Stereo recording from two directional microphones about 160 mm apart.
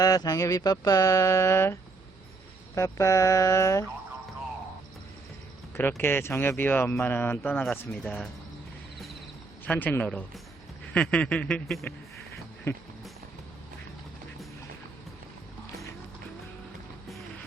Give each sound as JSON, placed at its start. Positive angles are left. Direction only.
{"t": 0.0, "sound": "a sound", "side_deg": 20}
{"t": 6.0, "sound": "speech", "side_deg": 15}
{"t": 9.6, "sound": "speech", "side_deg": 10}